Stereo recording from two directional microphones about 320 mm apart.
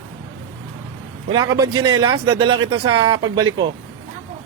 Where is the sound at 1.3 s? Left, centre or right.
Centre.